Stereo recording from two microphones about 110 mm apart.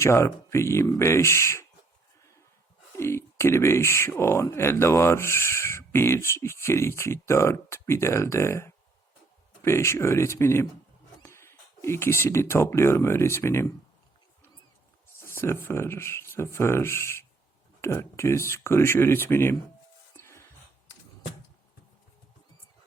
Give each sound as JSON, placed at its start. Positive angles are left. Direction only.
{"t": 0.0, "sound": "speech", "side_deg": 25}
{"t": 2.9, "sound": "speech", "side_deg": 25}
{"t": 15.2, "sound": "speech", "side_deg": 25}
{"t": 20.1, "sound": "a sound", "side_deg": 20}